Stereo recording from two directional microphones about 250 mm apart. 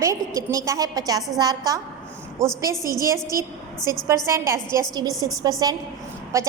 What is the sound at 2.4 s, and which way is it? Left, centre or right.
Speech, centre.